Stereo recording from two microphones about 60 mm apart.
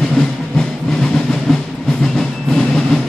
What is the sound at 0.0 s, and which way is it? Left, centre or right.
Train, centre.